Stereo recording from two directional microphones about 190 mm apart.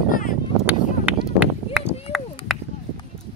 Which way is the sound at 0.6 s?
5° right (ahead or behind).